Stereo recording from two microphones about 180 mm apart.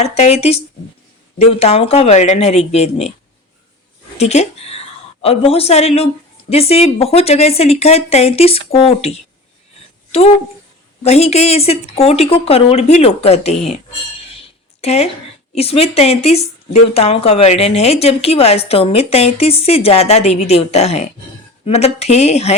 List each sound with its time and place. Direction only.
0.0 s speech: 35° left (ahead or behind)
4.2 s a woman's voice: 35° left (ahead or behind)
14.8 s speech: 35° left (ahead or behind)